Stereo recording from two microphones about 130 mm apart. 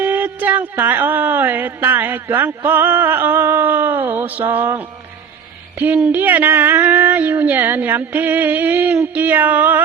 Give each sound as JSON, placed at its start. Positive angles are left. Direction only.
{"t": 0.0, "sound": "speech", "side_deg": -15}
{"t": 5.8, "sound": "speech", "side_deg": -15}